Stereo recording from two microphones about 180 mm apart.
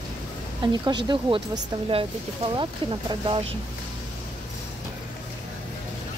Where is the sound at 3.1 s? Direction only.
30° right (ahead or behind).